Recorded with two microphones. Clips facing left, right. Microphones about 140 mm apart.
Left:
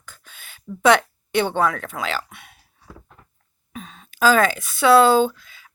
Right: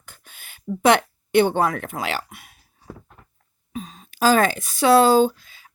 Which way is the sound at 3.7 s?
35° right (ahead or behind).